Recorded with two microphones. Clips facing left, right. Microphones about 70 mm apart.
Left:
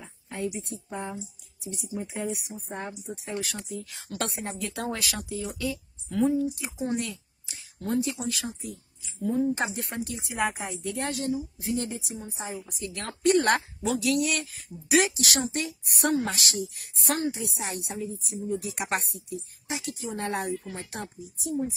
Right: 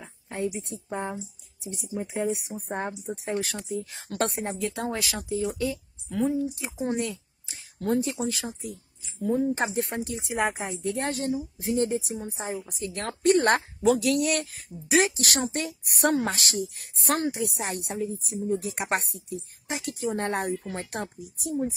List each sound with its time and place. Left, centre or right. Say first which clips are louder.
0.0 s a sound: right 2 dB; right
0.6 s speech: right 3 dB; right
2.5 s speech: right 4 dB; right
6.0 s speech: left 2 dB; centre
6.6 s speech: right 2 dB; right
7.5 s speech: right 2 dB; right
17.2 s speech: right 2 dB; right